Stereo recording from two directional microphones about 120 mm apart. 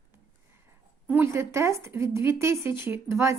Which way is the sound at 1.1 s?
20° right (ahead or behind).